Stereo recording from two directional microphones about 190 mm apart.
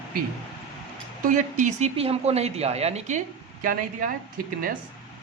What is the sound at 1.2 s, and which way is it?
Speech, 45° right (ahead or behind).